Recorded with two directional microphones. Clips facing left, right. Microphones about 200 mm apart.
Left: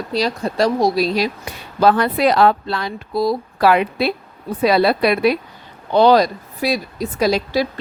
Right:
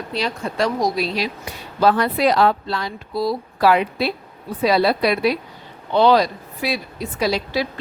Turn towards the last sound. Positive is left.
turn(degrees=45)  # may be behind; listen again after turning